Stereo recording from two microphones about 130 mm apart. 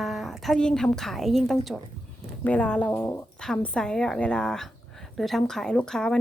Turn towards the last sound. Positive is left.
turn(degrees=5)  # may be behind; listen again after turning